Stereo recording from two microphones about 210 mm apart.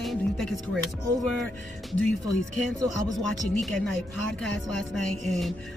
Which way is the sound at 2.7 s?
15° right (ahead or behind).